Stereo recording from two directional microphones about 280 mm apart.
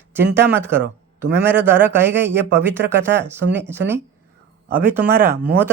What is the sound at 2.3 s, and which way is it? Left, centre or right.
Speech, right.